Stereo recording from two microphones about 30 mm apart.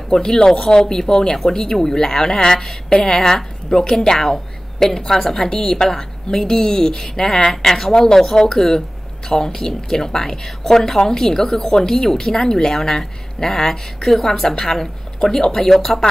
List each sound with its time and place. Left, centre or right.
0.1 s a woman's voice: centre
15.7 s speech: centre